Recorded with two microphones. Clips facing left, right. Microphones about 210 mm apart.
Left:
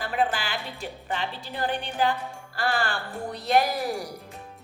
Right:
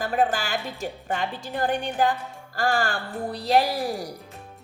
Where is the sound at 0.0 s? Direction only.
45° right (ahead or behind).